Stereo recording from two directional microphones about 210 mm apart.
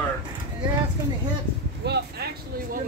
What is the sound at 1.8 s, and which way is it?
Vehicle, 50° right (ahead or behind).